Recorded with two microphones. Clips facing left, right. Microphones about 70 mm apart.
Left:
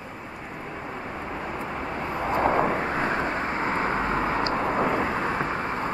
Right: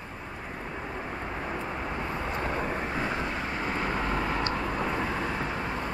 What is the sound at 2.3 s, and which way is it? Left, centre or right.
Vehicle, left.